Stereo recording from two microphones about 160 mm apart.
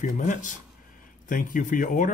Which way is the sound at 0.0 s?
50° left (ahead or behind).